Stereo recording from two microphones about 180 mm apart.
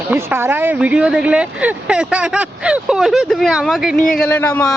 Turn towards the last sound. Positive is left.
turn(degrees=5)  # may be behind; listen again after turning